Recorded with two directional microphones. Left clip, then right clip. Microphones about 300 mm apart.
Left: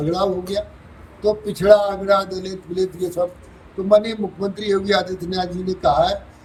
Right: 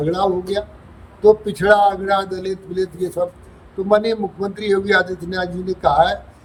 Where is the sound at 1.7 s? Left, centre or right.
Right.